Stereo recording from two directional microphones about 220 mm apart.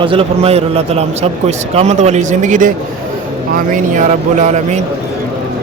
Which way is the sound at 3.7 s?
35° right (ahead or behind).